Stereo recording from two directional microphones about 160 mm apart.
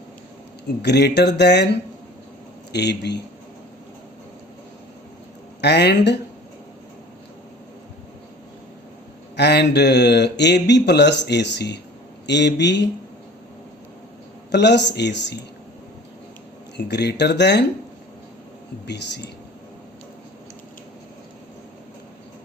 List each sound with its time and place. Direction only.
0.8 s speech: 90° left
5.5 s speech: 90° left
9.3 s speech: 90° left
14.5 s speech: 90° left
16.7 s speech: 90° left
18.9 s speech: 90° left